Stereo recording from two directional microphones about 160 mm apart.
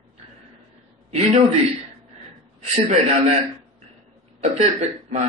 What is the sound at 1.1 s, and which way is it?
A man's voice, 40° right (ahead or behind).